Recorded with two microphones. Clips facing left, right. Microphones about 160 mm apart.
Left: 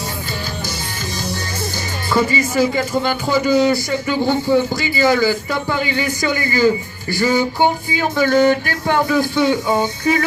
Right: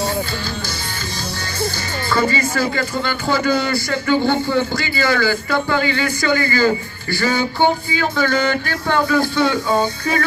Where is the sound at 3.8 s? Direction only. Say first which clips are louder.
Right 1 dB; 15° left (ahead or behind).